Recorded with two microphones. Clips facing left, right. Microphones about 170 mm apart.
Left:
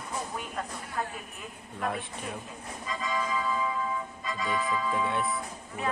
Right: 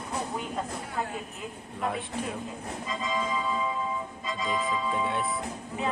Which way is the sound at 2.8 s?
20° right (ahead or behind).